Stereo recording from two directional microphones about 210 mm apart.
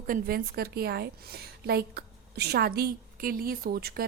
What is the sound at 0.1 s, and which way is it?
A woman's voice, 45° right (ahead or behind).